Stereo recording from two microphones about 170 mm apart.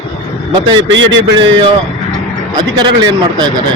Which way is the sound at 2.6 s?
25° right (ahead or behind).